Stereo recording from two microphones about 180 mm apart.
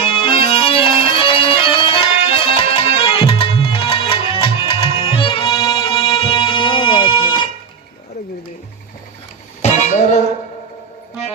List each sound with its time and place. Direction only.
0.0 s music: 30° left (ahead or behind)
9.6 s music: 40° left (ahead or behind)